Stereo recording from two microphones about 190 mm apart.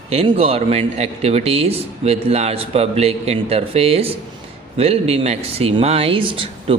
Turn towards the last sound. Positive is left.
turn(degrees=-30)  # may be behind; listen again after turning